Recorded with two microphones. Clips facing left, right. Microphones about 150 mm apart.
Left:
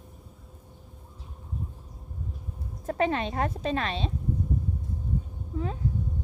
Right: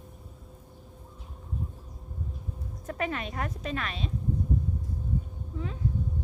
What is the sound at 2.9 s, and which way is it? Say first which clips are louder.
Speech: left 6 dB; 30° left (ahead or behind).